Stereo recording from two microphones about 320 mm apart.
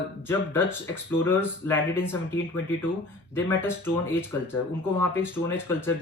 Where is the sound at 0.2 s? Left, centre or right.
Centre.